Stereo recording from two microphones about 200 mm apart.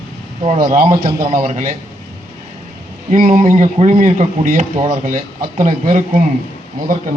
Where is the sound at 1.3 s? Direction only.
40° right (ahead or behind).